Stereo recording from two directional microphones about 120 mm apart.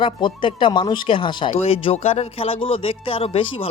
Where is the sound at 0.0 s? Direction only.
40° left (ahead or behind).